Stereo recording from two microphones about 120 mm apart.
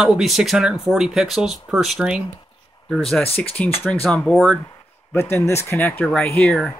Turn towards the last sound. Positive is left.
turn(degrees=5)  # may be behind; listen again after turning